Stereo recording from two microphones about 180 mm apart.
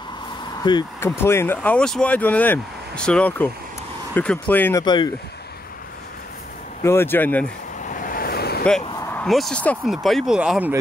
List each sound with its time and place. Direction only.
0.6 s speech: 25° left (ahead or behind)
4.8 s speech: 25° left (ahead or behind)
6.8 s speech: 15° left (ahead or behind)
7.8 s waves: 50° left (ahead or behind)
8.8 s a sound: 20° left (ahead or behind)
9.1 s speech: centre (ahead or behind)